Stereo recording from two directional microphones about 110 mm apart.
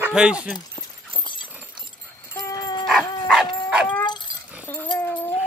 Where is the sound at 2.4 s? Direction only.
30° left (ahead or behind).